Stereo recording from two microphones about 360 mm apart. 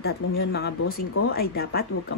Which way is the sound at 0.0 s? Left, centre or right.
Left.